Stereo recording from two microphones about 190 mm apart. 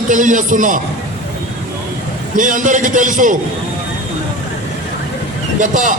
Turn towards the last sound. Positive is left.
turn(degrees=-40)  # may be behind; listen again after turning